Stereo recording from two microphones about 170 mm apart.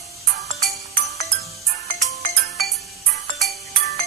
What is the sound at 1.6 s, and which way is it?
Ringtone, 65° right (ahead or behind).